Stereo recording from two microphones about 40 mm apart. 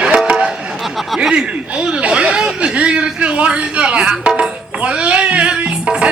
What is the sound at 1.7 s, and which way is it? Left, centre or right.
A man's voice, right.